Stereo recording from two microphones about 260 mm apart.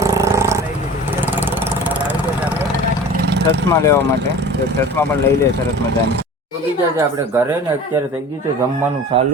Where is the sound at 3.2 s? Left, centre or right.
Right.